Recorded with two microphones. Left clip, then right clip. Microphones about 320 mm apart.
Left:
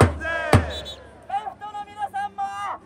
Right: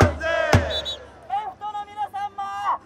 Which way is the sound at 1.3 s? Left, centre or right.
Centre.